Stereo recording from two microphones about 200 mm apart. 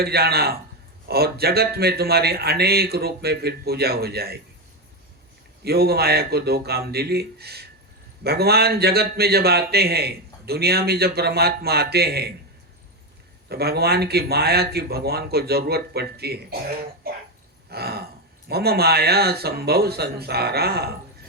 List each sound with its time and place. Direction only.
0.0 s a man's voice: 50° right (ahead or behind)
5.6 s a man's voice: 50° right (ahead or behind)
13.5 s a man's voice: 50° right (ahead or behind)
17.7 s a man's voice: 50° right (ahead or behind)